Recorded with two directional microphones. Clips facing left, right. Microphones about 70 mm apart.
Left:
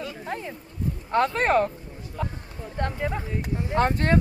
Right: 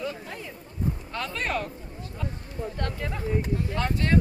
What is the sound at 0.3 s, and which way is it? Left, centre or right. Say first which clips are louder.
Speech: left 6 dB; left.